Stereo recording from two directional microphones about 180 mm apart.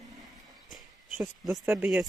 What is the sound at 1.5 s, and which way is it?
Speech, 10° right (ahead or behind).